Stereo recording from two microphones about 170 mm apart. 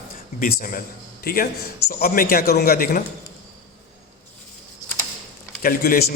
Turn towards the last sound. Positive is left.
turn(degrees=60)  # may be behind; listen again after turning